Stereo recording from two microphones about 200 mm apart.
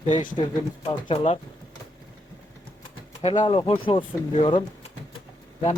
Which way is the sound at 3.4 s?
25° left (ahead or behind).